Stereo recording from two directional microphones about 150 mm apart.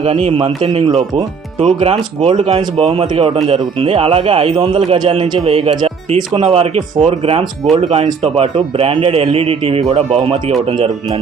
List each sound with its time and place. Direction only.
0.0 s a man's voice: 45° right (ahead or behind)